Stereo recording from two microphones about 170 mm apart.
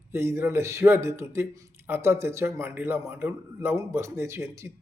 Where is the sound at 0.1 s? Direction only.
15° right (ahead or behind).